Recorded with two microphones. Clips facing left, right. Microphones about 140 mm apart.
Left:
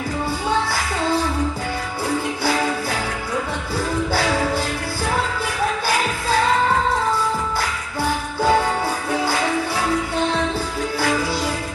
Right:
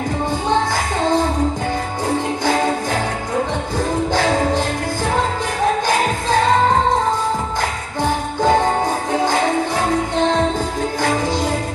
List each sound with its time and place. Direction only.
0.7 s music: 45° right (ahead or behind)
2.5 s music: 45° right (ahead or behind)
4.2 s music: 45° right (ahead or behind)
8.5 s music: 45° right (ahead or behind)